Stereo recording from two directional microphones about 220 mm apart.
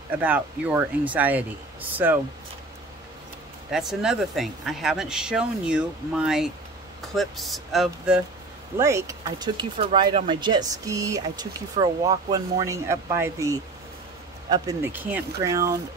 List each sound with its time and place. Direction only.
0.2 s speech: 5° right (ahead or behind)
3.7 s speech: centre (ahead or behind)
8.7 s speech: 15° right (ahead or behind)